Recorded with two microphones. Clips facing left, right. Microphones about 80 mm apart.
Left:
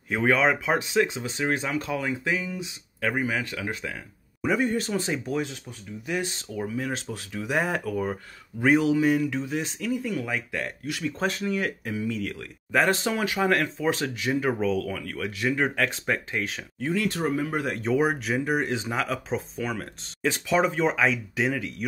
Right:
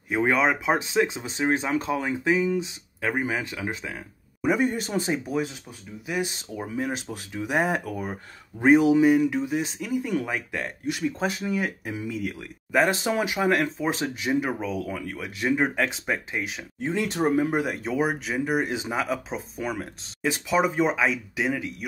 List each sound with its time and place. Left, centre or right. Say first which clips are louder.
0.1 s speech: even; centre
6.5 s speech: left 1 dB; right
11.1 s speech: even; centre
16.8 s speech: right 2 dB; right
17.8 s speech: left 2 dB; centre